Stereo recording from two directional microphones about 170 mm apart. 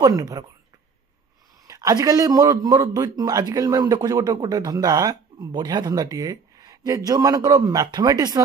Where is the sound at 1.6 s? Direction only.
20° right (ahead or behind).